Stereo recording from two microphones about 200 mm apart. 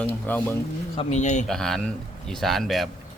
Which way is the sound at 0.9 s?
35° left (ahead or behind).